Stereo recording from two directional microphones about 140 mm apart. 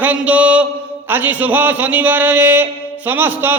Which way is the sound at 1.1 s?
15° right (ahead or behind).